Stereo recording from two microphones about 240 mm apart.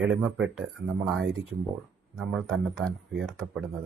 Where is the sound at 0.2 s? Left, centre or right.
Centre.